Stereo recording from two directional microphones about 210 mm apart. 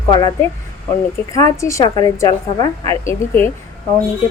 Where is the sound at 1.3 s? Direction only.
15° left (ahead or behind).